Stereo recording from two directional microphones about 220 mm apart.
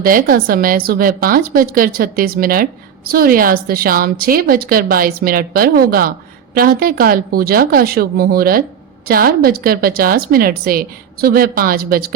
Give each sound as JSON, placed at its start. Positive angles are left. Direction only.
{"t": 0.0, "sound": "a woman's voice", "side_deg": -40}